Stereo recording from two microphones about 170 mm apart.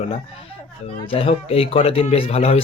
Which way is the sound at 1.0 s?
35° left (ahead or behind).